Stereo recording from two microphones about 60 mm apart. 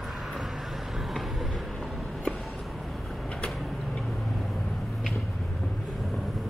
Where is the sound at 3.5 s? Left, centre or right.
Centre.